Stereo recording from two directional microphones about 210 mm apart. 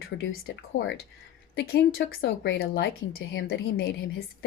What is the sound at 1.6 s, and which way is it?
Speech, 50° left (ahead or behind).